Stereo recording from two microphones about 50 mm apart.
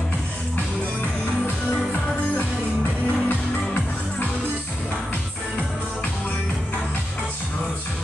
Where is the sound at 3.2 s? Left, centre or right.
Left.